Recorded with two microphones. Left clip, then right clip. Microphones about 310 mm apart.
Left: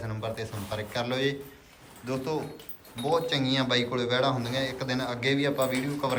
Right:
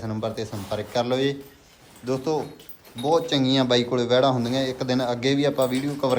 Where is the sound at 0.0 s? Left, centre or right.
Centre.